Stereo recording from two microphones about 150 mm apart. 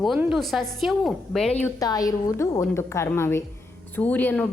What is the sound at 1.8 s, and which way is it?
A woman's voice, 25° left (ahead or behind).